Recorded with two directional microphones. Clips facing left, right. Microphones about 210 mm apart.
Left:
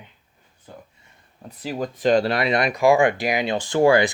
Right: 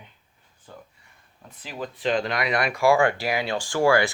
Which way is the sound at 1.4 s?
35° left (ahead or behind).